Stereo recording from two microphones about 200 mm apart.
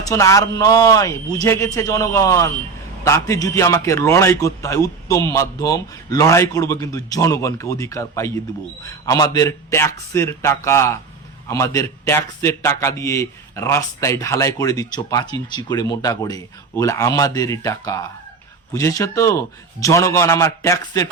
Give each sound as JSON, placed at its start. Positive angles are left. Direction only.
{"t": 0.0, "sound": "a man's voice", "side_deg": 15}